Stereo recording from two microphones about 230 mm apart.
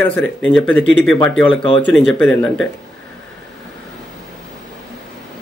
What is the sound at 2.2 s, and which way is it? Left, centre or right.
Speech, centre.